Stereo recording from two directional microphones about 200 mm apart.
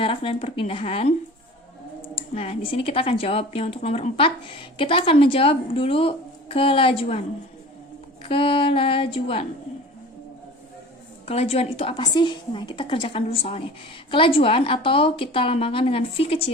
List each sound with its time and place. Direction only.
0.0 s a woman's voice: 25° left (ahead or behind)
2.1 s a woman's voice: 30° left (ahead or behind)
8.2 s a woman's voice: 25° left (ahead or behind)
11.3 s a woman's voice: 30° left (ahead or behind)